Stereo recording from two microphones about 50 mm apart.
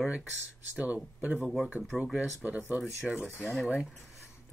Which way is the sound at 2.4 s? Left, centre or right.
Right.